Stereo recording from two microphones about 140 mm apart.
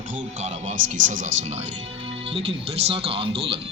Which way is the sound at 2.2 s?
40° right (ahead or behind).